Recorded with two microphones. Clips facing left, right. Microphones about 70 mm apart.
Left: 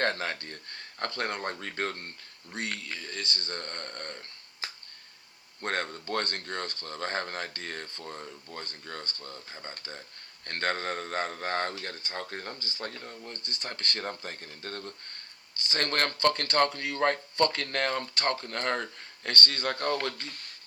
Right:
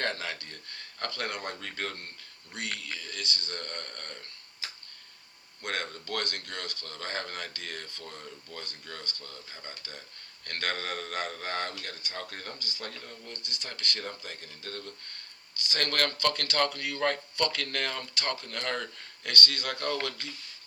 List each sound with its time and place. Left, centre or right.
0.0 s speech: left